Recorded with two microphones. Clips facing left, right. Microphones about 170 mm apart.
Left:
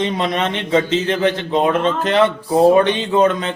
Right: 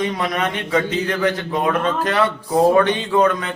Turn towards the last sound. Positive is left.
turn(degrees=25)  # may be behind; listen again after turning